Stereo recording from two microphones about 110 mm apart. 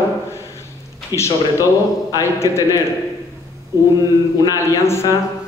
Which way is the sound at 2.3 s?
25° left (ahead or behind).